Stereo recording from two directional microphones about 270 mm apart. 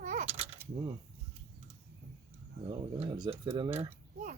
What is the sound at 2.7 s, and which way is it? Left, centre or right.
Speech, centre.